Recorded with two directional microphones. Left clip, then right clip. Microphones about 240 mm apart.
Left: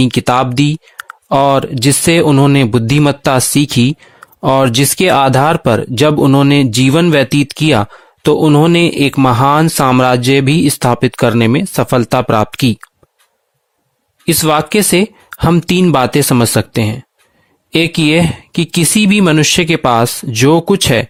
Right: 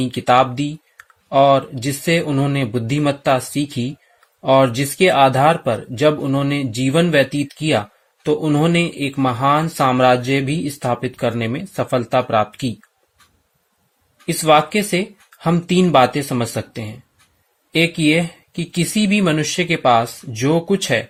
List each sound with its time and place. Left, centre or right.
0.0 s speech: left
14.3 s speech: left